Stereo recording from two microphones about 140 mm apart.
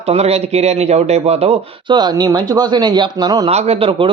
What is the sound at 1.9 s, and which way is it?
Speech, 30° right (ahead or behind).